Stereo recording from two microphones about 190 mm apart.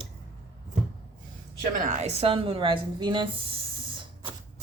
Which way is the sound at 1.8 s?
40° right (ahead or behind).